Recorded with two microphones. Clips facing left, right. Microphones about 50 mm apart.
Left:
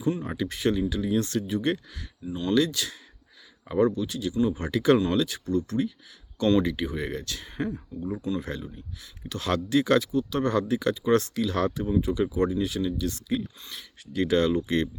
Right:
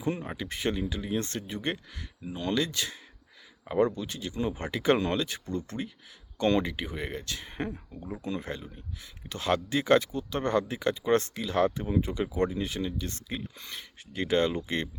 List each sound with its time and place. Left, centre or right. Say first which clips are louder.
0.2 s speech: left 5 dB; centre
2.2 s speech: left 4 dB; right
2.5 s speech: left 5 dB; right
4.7 s speech: left 3 dB; right
7.9 s speech: left 8 dB; right
8.4 s speech: left 4 dB; right